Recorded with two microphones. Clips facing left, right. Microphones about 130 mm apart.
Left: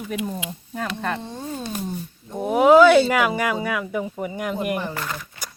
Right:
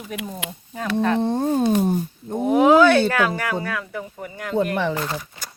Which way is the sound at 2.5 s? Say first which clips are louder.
Left 1 dB; 5° left (ahead or behind).